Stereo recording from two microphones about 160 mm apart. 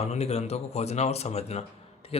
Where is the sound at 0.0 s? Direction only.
40° left (ahead or behind).